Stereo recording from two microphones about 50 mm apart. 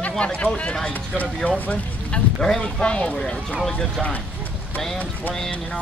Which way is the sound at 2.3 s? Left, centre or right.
Centre.